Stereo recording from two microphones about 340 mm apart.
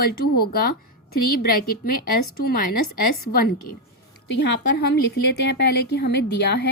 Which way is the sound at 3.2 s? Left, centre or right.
Left.